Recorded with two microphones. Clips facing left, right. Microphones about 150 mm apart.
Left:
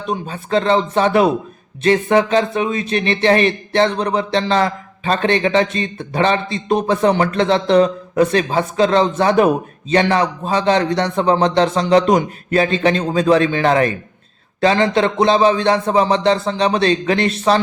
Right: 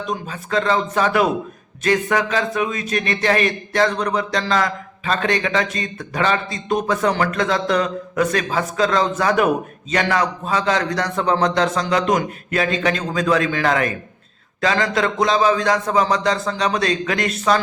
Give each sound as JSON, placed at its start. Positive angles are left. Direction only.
{"t": 0.0, "sound": "speech", "side_deg": 30}